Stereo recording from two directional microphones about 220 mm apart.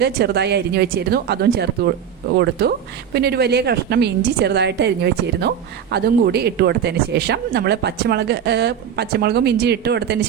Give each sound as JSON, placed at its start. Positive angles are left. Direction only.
{"t": 0.0, "sound": "speech", "side_deg": -50}